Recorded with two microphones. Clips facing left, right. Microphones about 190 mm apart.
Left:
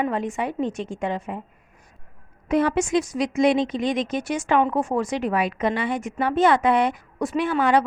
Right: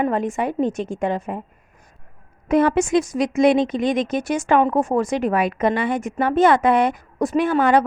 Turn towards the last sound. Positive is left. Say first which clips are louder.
# right 3 dB
turn(degrees=-45)  # may be behind; listen again after turning